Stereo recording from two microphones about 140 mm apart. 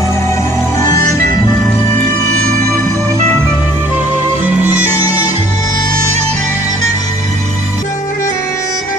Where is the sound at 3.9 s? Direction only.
15° right (ahead or behind).